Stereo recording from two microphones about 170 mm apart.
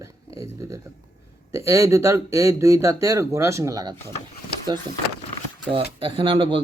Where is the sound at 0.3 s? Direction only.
15° right (ahead or behind).